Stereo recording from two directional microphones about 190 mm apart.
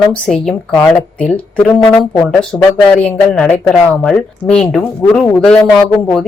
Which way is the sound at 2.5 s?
5° left (ahead or behind).